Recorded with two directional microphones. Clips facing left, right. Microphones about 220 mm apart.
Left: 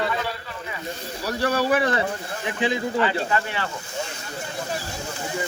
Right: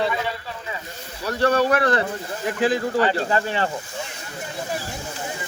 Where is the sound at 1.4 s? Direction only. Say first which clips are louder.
Right 3 dB; 10° left (ahead or behind).